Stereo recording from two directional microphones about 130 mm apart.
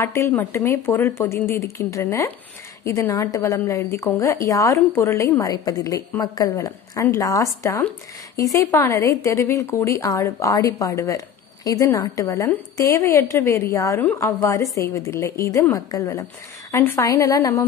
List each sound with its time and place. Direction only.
0.0 s a woman's voice: 20° left (ahead or behind)
12.4 s a woman's voice: 15° left (ahead or behind)